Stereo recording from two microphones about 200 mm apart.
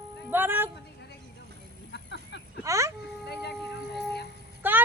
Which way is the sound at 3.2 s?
55° left (ahead or behind).